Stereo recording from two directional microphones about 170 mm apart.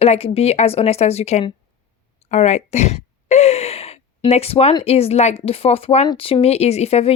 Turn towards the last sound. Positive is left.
turn(degrees=35)  # may be behind; listen again after turning